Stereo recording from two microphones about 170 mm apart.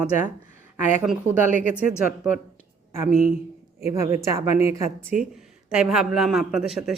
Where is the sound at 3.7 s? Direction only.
40° left (ahead or behind).